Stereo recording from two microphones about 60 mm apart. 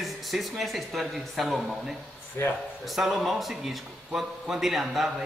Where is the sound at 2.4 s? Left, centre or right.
Left.